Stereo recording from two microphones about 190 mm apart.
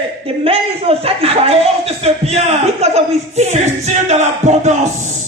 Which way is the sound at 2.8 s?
35° right (ahead or behind).